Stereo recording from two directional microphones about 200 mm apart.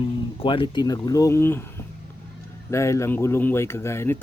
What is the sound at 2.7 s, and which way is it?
Speech, 15° left (ahead or behind).